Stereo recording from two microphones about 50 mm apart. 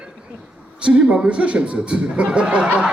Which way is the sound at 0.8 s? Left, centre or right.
Right.